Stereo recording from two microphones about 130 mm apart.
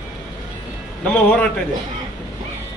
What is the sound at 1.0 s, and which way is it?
Speech, 10° left (ahead or behind).